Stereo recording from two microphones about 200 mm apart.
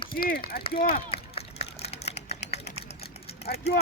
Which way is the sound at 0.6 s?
25° left (ahead or behind).